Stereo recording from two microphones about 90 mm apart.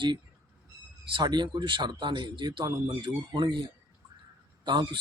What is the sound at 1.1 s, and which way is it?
Speech, 55° right (ahead or behind).